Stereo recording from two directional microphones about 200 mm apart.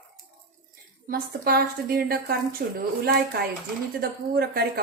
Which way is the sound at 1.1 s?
50° right (ahead or behind).